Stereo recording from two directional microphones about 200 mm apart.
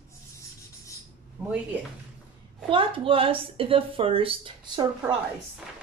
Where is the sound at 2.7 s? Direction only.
25° right (ahead or behind).